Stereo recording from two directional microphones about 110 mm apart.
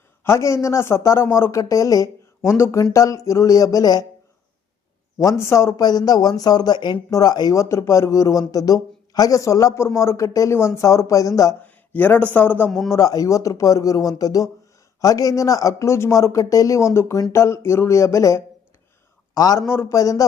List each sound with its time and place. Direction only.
0.3 s speech: 25° left (ahead or behind)
5.4 s speech: 25° left (ahead or behind)
11.6 s a man's voice: 15° left (ahead or behind)
12.9 s a man's voice: 30° left (ahead or behind)
19.6 s speech: 20° left (ahead or behind)